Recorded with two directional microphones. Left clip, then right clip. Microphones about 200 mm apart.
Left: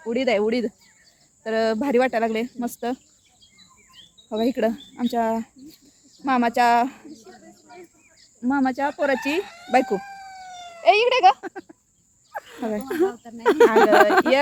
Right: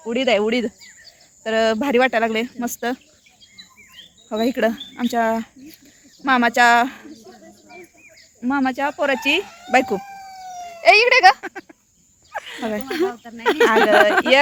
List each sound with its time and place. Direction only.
0.0 s speech: 10° right (ahead or behind)
4.3 s speech: centre (ahead or behind)
7.3 s cricket: 45° right (ahead or behind)
8.4 s speech: 10° left (ahead or behind)
9.4 s a sound: 45° right (ahead or behind)
9.6 s speech: centre (ahead or behind)
10.0 s cat: 35° right (ahead or behind)
10.8 s speech: centre (ahead or behind)
11.3 s goat: 25° left (ahead or behind)
12.3 s snake: 35° left (ahead or behind)
13.1 s speech: 15° right (ahead or behind)
13.4 s speech: 60° left (ahead or behind)